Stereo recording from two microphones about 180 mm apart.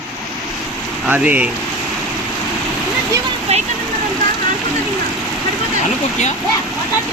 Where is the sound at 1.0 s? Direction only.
10° right (ahead or behind).